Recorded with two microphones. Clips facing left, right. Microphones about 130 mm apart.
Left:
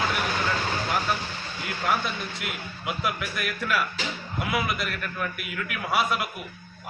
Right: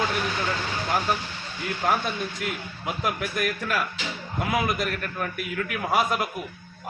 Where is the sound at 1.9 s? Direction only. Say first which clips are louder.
Right 1 dB; 40° right (ahead or behind).